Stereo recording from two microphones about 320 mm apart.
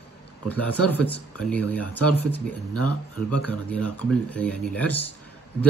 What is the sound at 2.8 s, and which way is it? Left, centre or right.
Speech, left.